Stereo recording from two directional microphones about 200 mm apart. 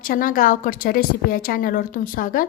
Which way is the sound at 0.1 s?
45° left (ahead or behind).